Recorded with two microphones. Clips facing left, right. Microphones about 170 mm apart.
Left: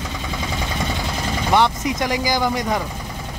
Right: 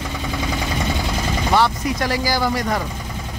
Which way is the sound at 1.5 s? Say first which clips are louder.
Left 1 dB; 20° left (ahead or behind).